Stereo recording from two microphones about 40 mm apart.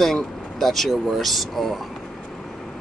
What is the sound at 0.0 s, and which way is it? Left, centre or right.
Speech, centre.